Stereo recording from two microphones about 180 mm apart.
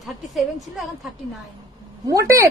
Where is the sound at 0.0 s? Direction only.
Centre (ahead or behind).